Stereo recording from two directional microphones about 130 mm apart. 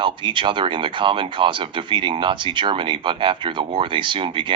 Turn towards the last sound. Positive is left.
turn(degrees=-40)  # may be behind; listen again after turning